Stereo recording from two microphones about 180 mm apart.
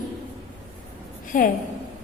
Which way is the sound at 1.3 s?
50° left (ahead or behind).